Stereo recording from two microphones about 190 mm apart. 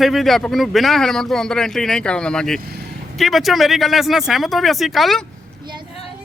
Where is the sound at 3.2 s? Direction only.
Centre (ahead or behind).